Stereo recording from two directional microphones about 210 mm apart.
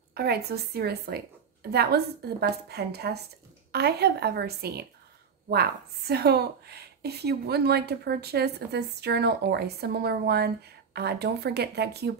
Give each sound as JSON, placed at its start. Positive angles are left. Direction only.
{"t": 0.1, "sound": "a woman's voice", "side_deg": -50}